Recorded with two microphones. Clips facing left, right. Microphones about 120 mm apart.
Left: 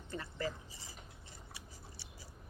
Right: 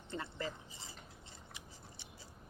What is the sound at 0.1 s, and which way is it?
Speech, 20° right (ahead or behind).